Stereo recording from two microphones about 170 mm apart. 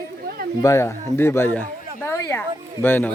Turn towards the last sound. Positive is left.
turn(degrees=10)  # may be behind; listen again after turning